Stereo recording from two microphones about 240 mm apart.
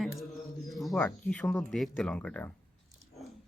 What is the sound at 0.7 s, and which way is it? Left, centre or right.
Speech, centre.